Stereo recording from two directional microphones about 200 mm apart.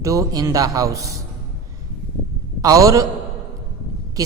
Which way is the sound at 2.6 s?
15° right (ahead or behind).